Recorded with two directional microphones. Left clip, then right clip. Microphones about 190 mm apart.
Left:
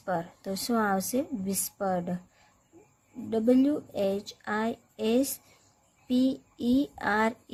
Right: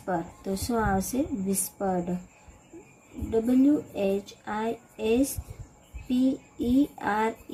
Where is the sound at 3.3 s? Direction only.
55° left (ahead or behind).